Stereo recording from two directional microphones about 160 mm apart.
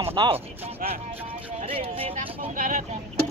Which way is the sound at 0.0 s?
35° right (ahead or behind).